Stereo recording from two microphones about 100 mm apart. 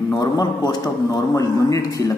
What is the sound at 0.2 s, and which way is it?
A man's voice, 40° left (ahead or behind).